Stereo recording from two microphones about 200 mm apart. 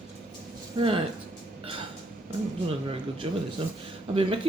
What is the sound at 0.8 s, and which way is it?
Speech, 20° right (ahead or behind).